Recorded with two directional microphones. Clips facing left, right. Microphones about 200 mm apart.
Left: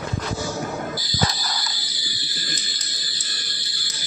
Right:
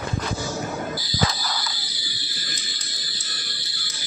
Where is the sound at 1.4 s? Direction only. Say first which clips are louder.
Right 1 dB; 40° left (ahead or behind).